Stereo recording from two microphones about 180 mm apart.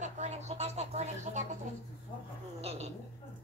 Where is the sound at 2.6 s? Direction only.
35° right (ahead or behind).